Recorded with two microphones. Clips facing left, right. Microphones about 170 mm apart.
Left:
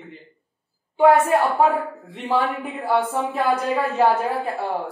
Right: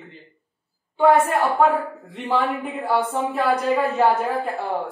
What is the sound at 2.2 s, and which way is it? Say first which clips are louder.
A woman's voice: even; 5° left (ahead or behind).